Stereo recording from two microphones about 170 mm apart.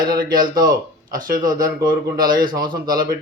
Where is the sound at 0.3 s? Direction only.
25° right (ahead or behind).